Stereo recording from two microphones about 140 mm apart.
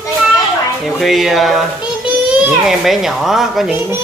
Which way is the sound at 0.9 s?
Centre (ahead or behind).